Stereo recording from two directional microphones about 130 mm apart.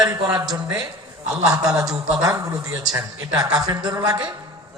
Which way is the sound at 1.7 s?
30° right (ahead or behind).